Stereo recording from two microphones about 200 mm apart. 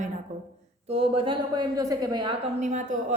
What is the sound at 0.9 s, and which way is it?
A woman's voice, 25° right (ahead or behind).